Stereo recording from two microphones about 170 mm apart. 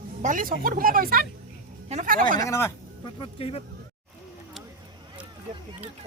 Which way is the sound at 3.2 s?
35° left (ahead or behind).